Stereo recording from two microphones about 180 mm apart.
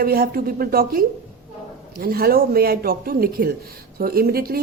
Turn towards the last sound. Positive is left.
turn(degrees=-55)  # may be behind; listen again after turning